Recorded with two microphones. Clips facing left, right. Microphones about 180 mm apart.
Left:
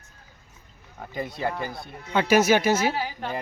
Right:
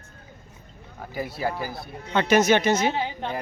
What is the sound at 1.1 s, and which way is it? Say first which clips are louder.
Speech: right 1 dB; 5° right (ahead or behind).